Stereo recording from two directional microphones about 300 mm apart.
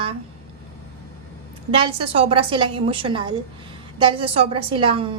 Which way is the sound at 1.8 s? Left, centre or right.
Centre.